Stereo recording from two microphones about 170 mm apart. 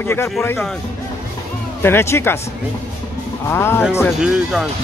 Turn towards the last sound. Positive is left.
turn(degrees=-5)  # may be behind; listen again after turning